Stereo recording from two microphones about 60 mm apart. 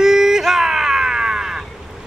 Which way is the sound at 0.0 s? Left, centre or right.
Centre.